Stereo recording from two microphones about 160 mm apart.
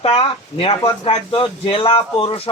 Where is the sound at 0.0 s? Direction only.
35° left (ahead or behind).